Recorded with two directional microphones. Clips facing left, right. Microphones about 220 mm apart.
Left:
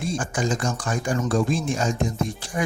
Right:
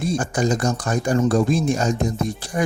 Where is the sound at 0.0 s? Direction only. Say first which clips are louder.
Right 4 dB; 40° right (ahead or behind).